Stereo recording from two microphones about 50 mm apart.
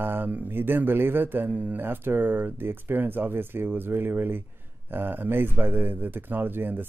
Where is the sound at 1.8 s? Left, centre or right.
Right.